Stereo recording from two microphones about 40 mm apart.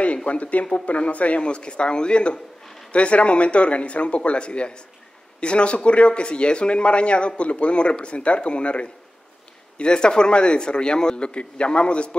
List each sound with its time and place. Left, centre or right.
0.0 s speech: left
1.4 s speech: left
2.6 s a sound: centre
2.9 s speech: left